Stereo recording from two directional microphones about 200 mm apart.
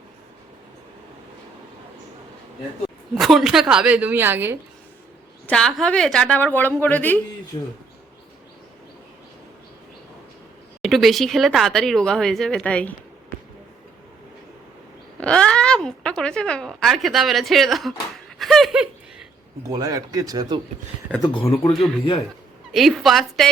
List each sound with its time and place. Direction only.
3.2 s speech: centre (ahead or behind)
5.5 s speech: 5° left (ahead or behind)
7.5 s speech: 20° left (ahead or behind)
10.8 s speech: centre (ahead or behind)
15.2 s speech: 5° left (ahead or behind)
18.3 s laughter: centre (ahead or behind)
19.6 s speech: 15° right (ahead or behind)
21.2 s speech: 25° left (ahead or behind)
22.7 s speech: centre (ahead or behind)